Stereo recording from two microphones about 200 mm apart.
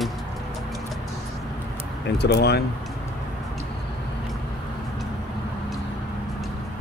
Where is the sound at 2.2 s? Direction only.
55° left (ahead or behind).